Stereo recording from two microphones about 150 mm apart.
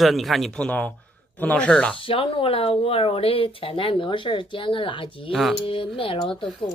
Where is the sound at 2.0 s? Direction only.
35° left (ahead or behind).